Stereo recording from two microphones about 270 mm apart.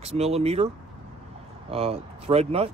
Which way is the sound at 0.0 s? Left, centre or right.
Right.